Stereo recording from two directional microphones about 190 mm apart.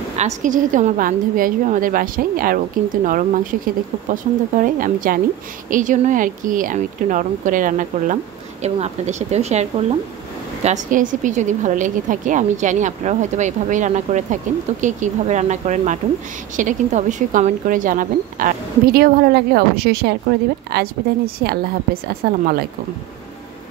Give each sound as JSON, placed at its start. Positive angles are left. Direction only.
{"t": 0.2, "sound": "a woman's voice", "side_deg": -40}
{"t": 22.2, "sound": "speech", "side_deg": -55}